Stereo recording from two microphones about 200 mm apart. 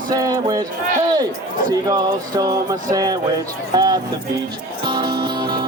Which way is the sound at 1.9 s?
20° right (ahead or behind).